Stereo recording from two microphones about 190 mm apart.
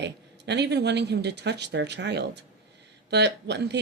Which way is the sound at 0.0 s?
65° right (ahead or behind).